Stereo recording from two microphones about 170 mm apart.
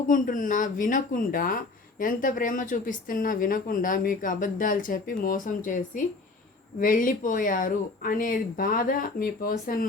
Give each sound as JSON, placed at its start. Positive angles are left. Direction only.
{"t": 0.1, "sound": "speech", "side_deg": 50}